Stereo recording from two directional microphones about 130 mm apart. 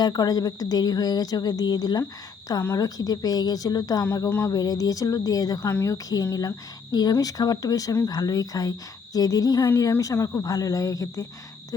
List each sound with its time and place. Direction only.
0.0 s speech: 30° left (ahead or behind)
4.3 s speech: 15° left (ahead or behind)
4.5 s speech: 30° left (ahead or behind)